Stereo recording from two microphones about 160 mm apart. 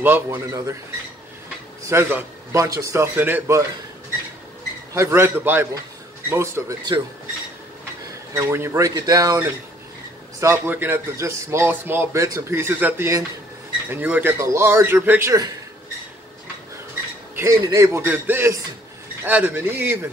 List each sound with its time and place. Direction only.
0.0 s speech: 15° right (ahead or behind)
1.9 s speech: 15° right (ahead or behind)
4.9 s speech: 15° right (ahead or behind)
8.4 s speech: 15° right (ahead or behind)
17.4 s speech: 20° right (ahead or behind)